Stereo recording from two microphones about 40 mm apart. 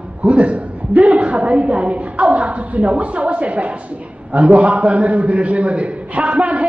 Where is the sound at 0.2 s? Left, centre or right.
Right.